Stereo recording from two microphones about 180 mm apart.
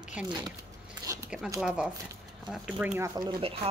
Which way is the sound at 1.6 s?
5° right (ahead or behind).